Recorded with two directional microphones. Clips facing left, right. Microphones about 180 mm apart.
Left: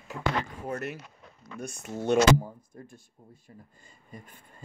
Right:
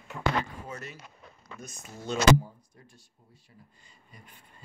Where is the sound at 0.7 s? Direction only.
60° left (ahead or behind).